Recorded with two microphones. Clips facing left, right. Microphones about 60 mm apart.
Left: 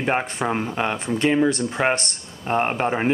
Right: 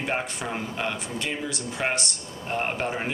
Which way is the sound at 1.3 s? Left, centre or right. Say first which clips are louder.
Left 12 dB; left.